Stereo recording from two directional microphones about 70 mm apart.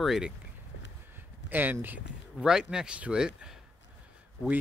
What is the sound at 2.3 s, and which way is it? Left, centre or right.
Speech, centre.